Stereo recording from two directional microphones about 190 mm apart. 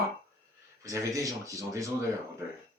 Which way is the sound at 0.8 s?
15° right (ahead or behind).